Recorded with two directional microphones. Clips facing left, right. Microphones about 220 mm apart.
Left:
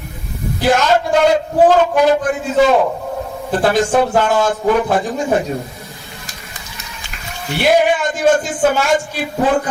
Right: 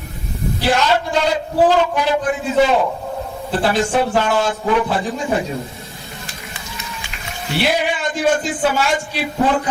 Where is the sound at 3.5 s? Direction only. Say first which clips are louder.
Left 3 dB; 45° left (ahead or behind).